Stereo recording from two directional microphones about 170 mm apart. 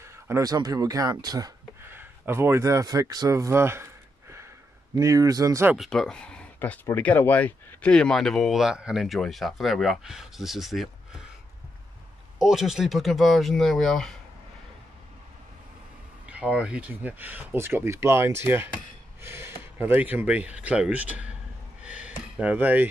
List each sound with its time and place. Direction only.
0.0 s speech: 15° right (ahead or behind)
5.8 s speech: 5° left (ahead or behind)
12.4 s speech: centre (ahead or behind)
16.3 s speech: 5° right (ahead or behind)
21.8 s a sound: 5° right (ahead or behind)